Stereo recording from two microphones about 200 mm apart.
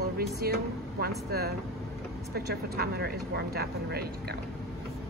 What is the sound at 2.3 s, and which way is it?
Speech, 55° right (ahead or behind).